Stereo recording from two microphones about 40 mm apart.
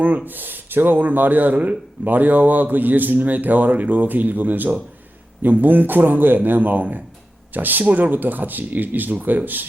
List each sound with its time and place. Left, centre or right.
0.3 s a man's voice: right